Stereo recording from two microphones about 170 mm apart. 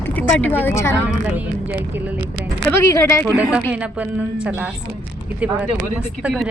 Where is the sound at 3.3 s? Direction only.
5° right (ahead or behind).